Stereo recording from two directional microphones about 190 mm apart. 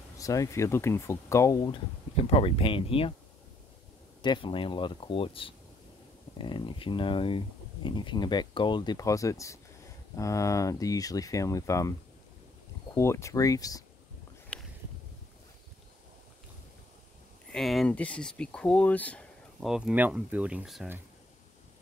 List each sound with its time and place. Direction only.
0.2 s speech: 15° left (ahead or behind)
4.2 s speech: 25° left (ahead or behind)
12.9 s speech: 15° left (ahead or behind)
17.5 s speech: centre (ahead or behind)